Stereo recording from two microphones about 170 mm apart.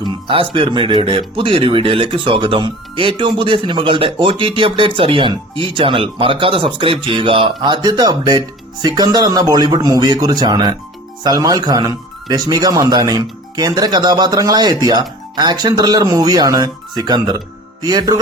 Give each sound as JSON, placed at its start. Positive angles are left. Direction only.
{"t": 0.0, "sound": "speech", "side_deg": -30}